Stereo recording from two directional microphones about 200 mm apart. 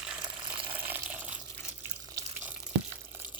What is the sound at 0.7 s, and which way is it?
Water, 10° right (ahead or behind).